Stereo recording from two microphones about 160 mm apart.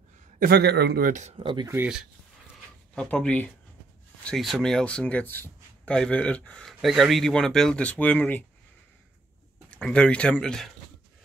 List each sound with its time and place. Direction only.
0.4 s speech: 85° right; by 1.2 s 65° right (ahead or behind)
1.4 s speech: 30° right (ahead or behind)
2.9 s speech: 5° left (ahead or behind)
9.7 s speech: 5° left (ahead or behind)